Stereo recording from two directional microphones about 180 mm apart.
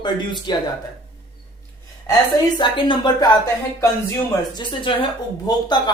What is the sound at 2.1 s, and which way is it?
A woman's voice, 20° left (ahead or behind).